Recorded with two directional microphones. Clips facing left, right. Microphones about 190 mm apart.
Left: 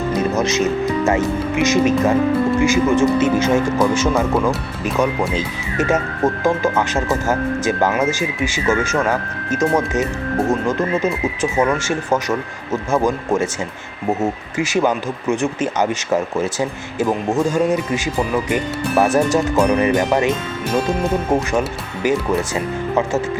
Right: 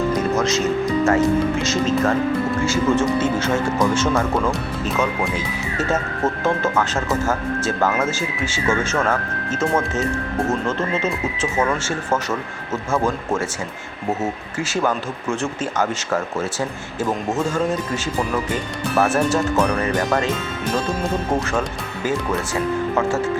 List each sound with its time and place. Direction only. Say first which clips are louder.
0.3 s speech: left 1 dB; 20° left (ahead or behind)
1.6 s speech: left 4 dB; 15° left (ahead or behind)
5.7 s speech: left 5 dB; 15° left (ahead or behind)
22.0 s speech: left 5 dB; 15° left (ahead or behind)